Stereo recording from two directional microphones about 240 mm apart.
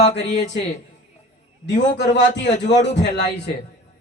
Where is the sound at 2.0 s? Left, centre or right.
Left.